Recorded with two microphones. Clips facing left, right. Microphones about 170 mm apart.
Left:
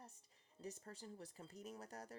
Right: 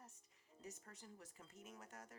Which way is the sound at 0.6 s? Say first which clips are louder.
Left 5 dB; 35° left (ahead or behind).